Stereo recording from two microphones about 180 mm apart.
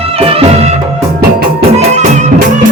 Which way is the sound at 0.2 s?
35° right (ahead or behind).